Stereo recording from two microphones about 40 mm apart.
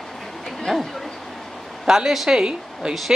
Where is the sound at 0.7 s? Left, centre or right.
Centre.